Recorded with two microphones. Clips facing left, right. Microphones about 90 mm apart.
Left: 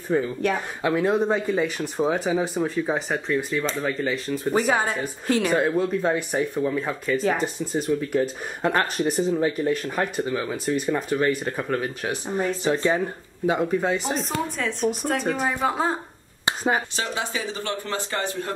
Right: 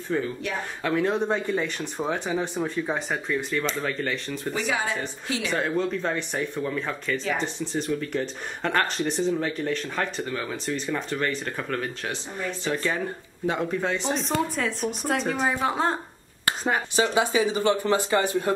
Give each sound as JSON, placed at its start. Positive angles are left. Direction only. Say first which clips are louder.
{"t": 0.1, "sound": "speech", "louder": "left 5 dB", "side_deg": 20}
{"t": 4.5, "sound": "speech", "louder": "left 5 dB", "side_deg": 45}
{"t": 5.8, "sound": "speech", "louder": "left 4 dB", "side_deg": 10}
{"t": 12.7, "sound": "speech", "louder": "left 4 dB", "side_deg": 20}
{"t": 13.5, "sound": "speech", "louder": "left 4 dB", "side_deg": 10}
{"t": 16.9, "sound": "speech", "louder": "right 6 dB", "side_deg": -15}